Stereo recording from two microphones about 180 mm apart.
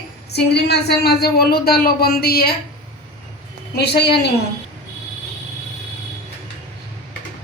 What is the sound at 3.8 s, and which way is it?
Speech, 65° left (ahead or behind).